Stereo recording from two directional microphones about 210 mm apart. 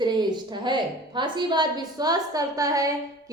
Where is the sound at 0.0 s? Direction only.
20° right (ahead or behind).